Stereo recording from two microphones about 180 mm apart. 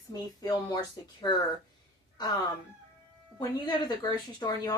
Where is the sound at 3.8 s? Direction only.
20° left (ahead or behind).